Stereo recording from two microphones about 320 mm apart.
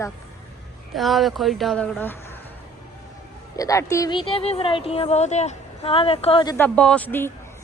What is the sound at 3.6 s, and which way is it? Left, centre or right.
Speech, centre.